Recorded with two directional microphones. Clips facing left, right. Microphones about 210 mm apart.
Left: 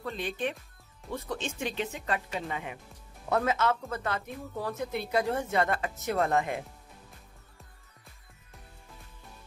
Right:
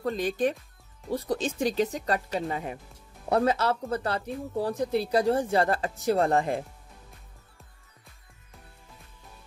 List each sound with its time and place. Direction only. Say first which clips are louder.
0.0 s speech: right 7 dB; 40° right (ahead or behind)